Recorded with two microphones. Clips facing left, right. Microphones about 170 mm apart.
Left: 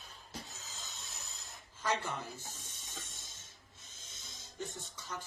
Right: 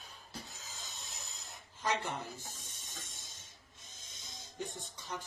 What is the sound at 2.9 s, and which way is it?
Hiss, 15° right (ahead or behind).